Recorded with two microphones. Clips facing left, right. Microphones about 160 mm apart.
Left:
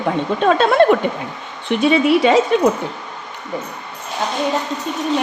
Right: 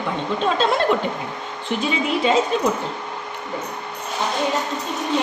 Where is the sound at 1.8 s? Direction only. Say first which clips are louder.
Left 9 dB; 70° left (ahead or behind).